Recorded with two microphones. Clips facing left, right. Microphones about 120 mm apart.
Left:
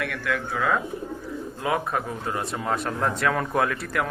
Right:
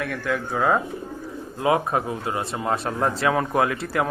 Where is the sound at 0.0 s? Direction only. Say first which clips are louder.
Right 2 dB; 30° right (ahead or behind).